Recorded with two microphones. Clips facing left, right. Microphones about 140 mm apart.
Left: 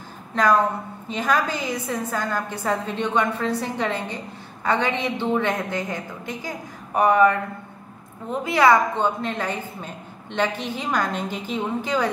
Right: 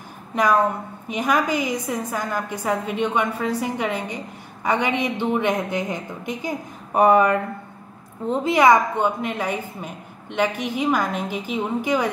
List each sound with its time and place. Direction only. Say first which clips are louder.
0.3 s a woman's voice: even; 10° right (ahead or behind)
8.3 s a woman's voice: right 2 dB; 20° right (ahead or behind)